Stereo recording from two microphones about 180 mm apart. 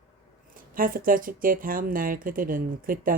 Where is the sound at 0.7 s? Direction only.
50° right (ahead or behind).